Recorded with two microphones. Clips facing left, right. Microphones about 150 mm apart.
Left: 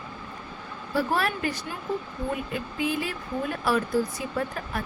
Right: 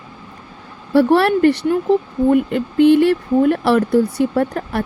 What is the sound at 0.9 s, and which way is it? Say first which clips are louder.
Speech: right 13 dB; 70° right (ahead or behind).